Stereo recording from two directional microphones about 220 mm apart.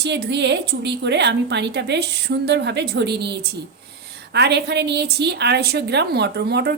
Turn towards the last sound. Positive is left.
turn(degrees=-50)  # may be behind; listen again after turning